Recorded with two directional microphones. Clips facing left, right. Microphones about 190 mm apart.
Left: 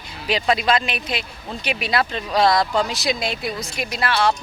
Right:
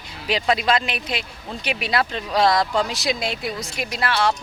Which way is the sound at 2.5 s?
30° left (ahead or behind).